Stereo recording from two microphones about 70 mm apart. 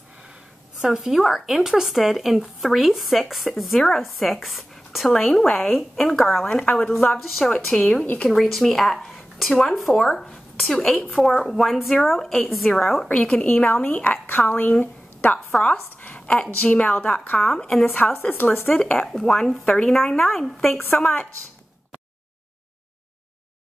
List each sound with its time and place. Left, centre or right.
0.7 s speech: centre
6.6 s speech: centre
8.0 s speech: left
8.3 s speech: centre
17.4 s speech: centre
18.1 s speech: left
18.8 s speech: centre